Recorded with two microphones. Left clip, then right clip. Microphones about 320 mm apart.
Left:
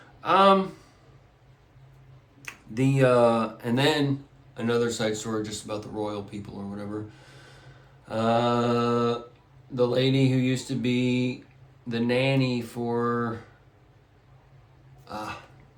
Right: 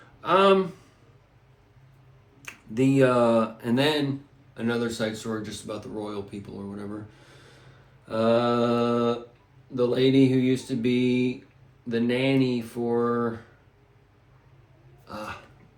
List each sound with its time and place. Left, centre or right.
0.2 s speech: centre
2.4 s speech: centre
8.0 s speech: centre
15.0 s burping: centre